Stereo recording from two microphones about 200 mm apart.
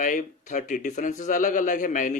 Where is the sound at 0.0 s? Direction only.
40° left (ahead or behind).